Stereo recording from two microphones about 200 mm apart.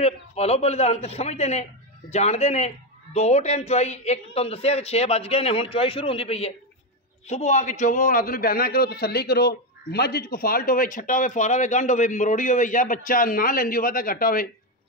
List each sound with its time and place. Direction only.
0.0 s a man's voice: 30° left (ahead or behind)